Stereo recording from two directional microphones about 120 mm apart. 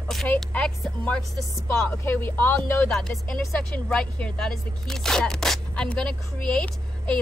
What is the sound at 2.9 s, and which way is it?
Speech, 5° left (ahead or behind).